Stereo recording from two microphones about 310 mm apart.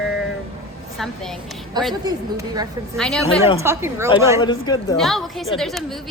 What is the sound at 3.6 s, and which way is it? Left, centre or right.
Speech, centre.